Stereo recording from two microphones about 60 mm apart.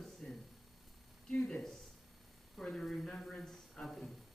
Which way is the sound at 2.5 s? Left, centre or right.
Centre.